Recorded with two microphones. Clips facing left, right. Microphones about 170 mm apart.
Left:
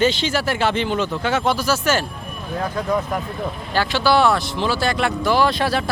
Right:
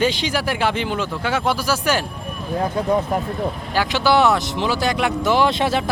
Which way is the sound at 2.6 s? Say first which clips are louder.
Right 2 dB; 30° right (ahead or behind).